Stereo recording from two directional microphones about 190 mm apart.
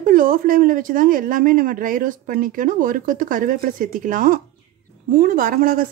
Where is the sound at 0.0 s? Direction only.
50° right (ahead or behind).